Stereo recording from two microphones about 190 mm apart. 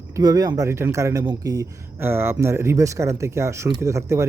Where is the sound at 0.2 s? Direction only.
20° right (ahead or behind).